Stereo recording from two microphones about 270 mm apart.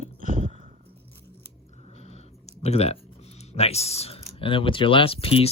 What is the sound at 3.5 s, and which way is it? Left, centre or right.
Speech, left.